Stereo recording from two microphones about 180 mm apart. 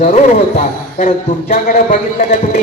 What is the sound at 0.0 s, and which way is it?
A man's voice, 40° left (ahead or behind).